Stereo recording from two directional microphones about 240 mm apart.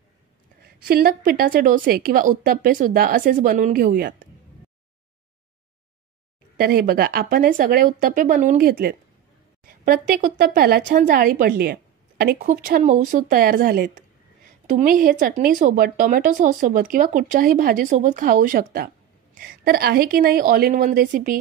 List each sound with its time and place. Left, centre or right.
0.6 s speech: right
6.5 s speech: right